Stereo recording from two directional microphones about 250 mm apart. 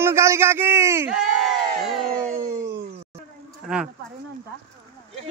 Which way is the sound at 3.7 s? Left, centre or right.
Centre.